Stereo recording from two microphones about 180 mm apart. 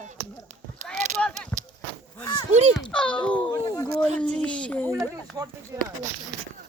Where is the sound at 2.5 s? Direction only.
40° right (ahead or behind).